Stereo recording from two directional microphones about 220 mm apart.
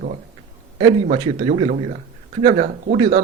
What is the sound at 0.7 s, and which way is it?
A man's voice, 25° right (ahead or behind).